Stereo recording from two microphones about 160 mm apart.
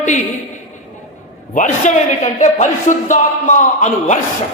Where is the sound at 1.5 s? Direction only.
55° left (ahead or behind).